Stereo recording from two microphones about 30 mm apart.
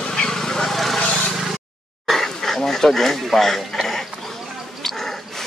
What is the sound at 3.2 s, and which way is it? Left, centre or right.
Speech, centre.